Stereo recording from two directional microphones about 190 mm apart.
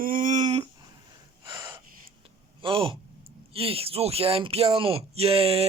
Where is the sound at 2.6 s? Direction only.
30° right (ahead or behind).